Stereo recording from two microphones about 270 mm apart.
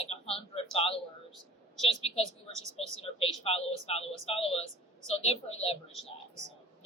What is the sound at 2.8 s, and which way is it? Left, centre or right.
A woman's voice, left.